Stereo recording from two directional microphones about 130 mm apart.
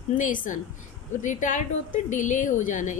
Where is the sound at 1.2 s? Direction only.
75° left (ahead or behind).